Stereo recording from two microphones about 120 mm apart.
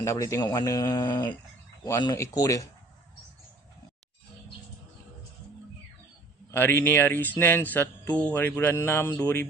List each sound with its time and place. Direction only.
0.0 s speech: 25° left (ahead or behind)
6.5 s speech: 20° left (ahead or behind)